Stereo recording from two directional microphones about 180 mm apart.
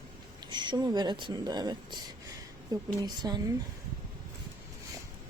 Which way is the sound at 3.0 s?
20° right (ahead or behind).